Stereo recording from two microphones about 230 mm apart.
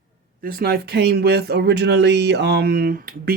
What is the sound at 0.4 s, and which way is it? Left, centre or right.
Speech, right.